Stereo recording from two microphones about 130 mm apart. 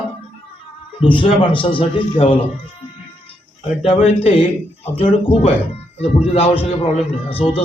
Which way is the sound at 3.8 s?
50° left (ahead or behind).